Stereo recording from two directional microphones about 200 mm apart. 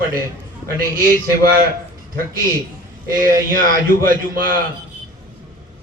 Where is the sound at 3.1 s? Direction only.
45° right (ahead or behind).